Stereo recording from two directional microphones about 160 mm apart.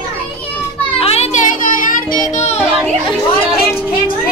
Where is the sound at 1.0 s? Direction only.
40° left (ahead or behind); by 2.2 s 60° left (ahead or behind).